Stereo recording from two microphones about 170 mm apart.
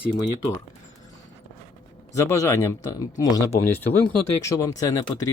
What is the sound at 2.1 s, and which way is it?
Speech, 15° left (ahead or behind).